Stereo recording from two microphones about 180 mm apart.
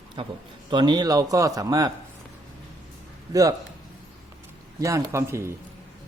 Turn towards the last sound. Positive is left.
turn(degrees=-15)  # may be behind; listen again after turning